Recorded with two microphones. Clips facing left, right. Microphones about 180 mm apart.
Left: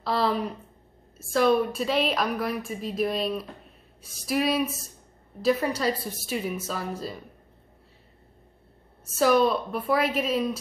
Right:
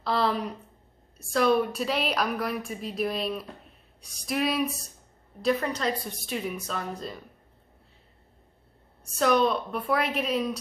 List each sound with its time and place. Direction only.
0.0 s a woman's voice: centre (ahead or behind)
9.0 s a woman's voice: 5° left (ahead or behind)